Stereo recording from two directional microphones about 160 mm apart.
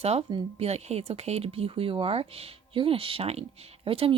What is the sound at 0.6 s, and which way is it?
Speech, 40° right (ahead or behind).